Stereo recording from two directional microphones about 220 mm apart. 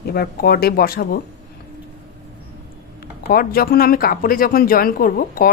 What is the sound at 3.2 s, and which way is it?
A woman's voice, 40° left (ahead or behind).